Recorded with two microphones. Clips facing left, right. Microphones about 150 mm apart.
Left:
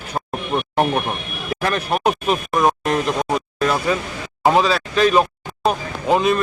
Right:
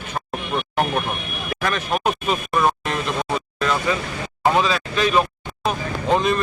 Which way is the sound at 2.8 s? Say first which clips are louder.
Left 5 dB; 35° left (ahead or behind).